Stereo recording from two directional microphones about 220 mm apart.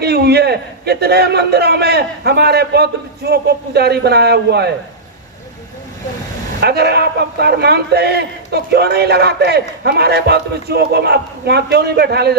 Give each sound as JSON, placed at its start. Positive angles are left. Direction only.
{"t": 0.0, "sound": "a man's voice", "side_deg": -45}
{"t": 6.6, "sound": "a man's voice", "side_deg": -50}